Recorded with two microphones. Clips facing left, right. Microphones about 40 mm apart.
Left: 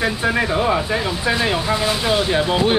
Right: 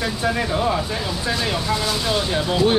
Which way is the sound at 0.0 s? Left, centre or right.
Left.